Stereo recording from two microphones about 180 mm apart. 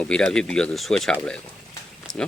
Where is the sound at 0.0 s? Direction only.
5° left (ahead or behind).